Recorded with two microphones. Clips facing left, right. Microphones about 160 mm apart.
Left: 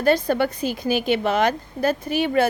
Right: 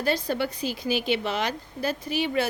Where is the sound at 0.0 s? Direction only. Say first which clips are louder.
Left 7 dB; 55° left (ahead or behind).